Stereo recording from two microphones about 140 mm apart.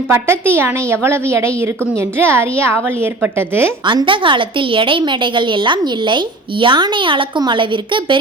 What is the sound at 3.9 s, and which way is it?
A woman's voice, 35° right (ahead or behind).